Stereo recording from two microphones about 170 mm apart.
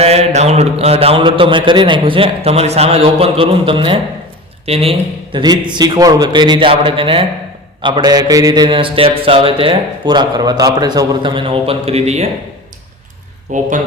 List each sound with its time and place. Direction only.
0.0 s a man's voice: 40° right (ahead or behind)
13.5 s speech: 45° right (ahead or behind)